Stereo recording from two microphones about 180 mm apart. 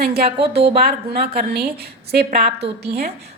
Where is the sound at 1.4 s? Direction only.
55° right (ahead or behind).